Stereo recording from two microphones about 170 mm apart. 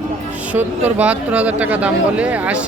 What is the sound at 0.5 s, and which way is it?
Speech, 10° right (ahead or behind).